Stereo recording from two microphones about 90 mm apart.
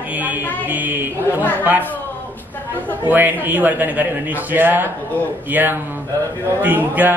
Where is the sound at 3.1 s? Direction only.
20° right (ahead or behind).